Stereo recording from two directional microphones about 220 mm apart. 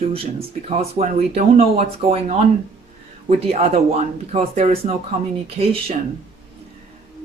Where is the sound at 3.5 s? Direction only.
30° right (ahead or behind).